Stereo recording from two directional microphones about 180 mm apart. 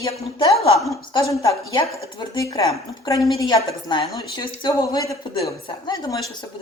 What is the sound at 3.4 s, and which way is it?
A woman's voice, 20° left (ahead or behind).